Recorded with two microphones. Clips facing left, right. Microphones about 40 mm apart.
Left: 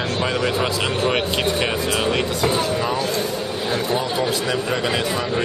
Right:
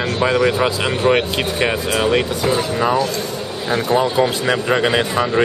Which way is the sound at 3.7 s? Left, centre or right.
Right.